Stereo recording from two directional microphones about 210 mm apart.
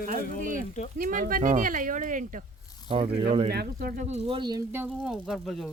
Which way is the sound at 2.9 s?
25° right (ahead or behind).